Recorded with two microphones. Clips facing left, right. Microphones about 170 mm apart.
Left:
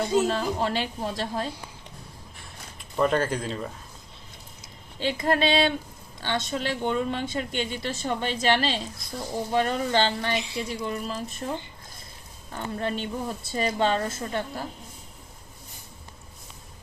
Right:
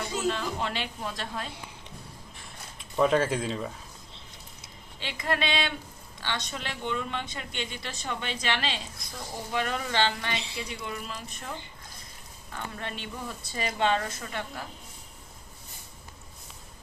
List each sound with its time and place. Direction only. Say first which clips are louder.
0.3 s a woman's voice: left 4 dB; 40° left (ahead or behind)
2.7 s speech: even; centre (ahead or behind)
4.9 s a woman's voice: left 7 dB; 40° left (ahead or behind)
12.5 s a woman's voice: left 8 dB; 35° left (ahead or behind)